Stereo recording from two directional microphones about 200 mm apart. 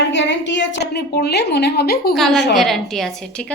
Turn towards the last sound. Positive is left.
turn(degrees=0)  # may be behind; listen again after turning